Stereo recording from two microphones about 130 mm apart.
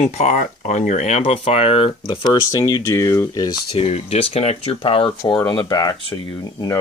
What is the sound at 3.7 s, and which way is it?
Speech, 50° left (ahead or behind).